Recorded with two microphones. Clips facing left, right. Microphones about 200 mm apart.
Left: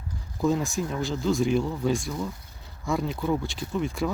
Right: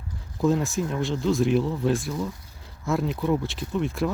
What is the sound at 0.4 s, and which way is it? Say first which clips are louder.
Speech: right 2 dB; centre (ahead or behind).